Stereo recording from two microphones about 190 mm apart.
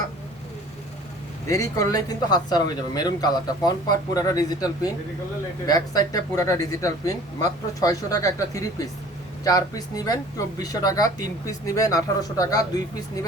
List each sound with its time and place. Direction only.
1.5 s speech: 15° left (ahead or behind)